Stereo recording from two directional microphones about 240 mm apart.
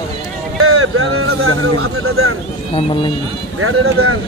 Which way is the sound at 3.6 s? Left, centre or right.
Right.